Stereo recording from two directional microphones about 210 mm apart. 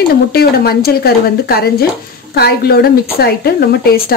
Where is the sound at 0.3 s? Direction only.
45° left (ahead or behind).